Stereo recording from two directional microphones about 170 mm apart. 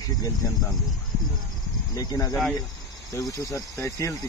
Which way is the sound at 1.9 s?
20° left (ahead or behind).